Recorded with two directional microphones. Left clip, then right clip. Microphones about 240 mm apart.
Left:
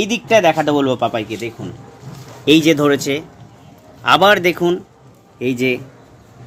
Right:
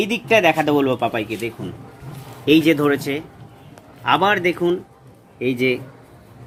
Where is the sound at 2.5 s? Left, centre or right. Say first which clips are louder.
Left 3 dB; left.